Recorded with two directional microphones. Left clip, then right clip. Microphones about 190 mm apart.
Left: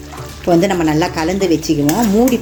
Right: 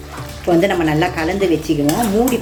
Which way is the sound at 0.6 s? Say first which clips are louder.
Even; 50° left (ahead or behind).